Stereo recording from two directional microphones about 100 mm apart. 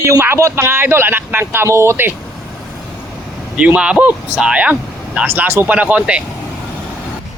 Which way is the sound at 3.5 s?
10° right (ahead or behind).